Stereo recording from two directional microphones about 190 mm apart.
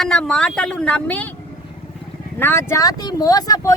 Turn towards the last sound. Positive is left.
turn(degrees=20)  # may be behind; listen again after turning